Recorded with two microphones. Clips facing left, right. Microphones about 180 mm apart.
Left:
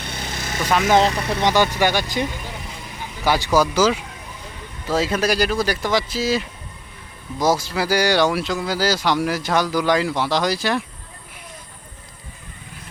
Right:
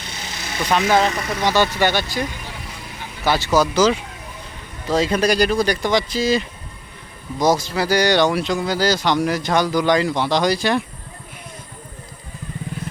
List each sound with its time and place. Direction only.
0.0 s vehicle: 55° left (ahead or behind)
1.0 s speech: 25° left (ahead or behind)
1.5 s speech: 15° left (ahead or behind)
3.2 s speech: 10° left (ahead or behind)